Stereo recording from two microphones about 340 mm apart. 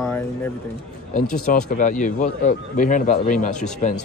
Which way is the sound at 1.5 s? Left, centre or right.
Left.